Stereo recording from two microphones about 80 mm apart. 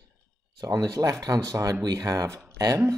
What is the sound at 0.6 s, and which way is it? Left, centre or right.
Speech, right.